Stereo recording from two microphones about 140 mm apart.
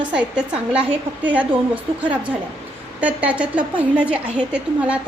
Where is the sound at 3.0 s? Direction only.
10° right (ahead or behind).